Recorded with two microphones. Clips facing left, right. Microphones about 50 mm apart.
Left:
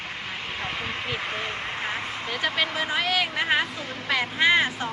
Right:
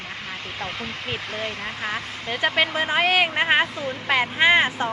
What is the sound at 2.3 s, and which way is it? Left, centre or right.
Speech, right.